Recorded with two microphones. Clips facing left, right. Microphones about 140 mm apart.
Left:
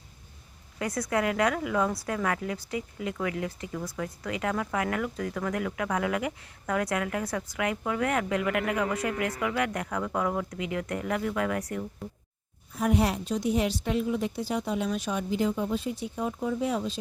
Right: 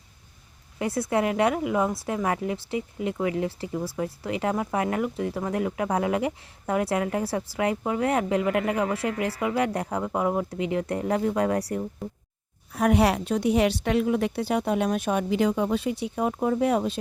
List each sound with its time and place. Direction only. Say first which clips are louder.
0.8 s speech: right 3 dB; 25° right (ahead or behind)
12.7 s a woman's voice: right 5 dB; 70° right (ahead or behind)